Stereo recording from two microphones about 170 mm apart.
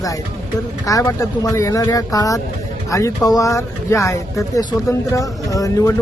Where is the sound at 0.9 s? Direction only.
20° left (ahead or behind).